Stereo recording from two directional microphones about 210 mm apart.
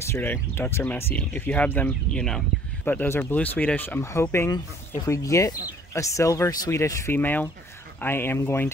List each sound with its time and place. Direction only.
0.0 s speech: 10° left (ahead or behind)